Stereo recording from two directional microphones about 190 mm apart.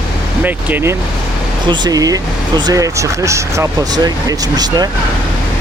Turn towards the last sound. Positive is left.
turn(degrees=-20)  # may be behind; listen again after turning